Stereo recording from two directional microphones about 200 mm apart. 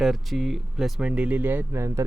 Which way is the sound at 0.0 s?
Centre (ahead or behind).